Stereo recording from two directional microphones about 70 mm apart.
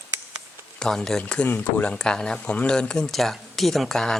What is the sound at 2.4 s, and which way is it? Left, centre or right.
Speech, centre.